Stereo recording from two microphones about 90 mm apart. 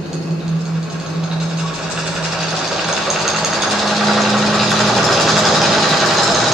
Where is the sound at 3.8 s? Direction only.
Centre (ahead or behind).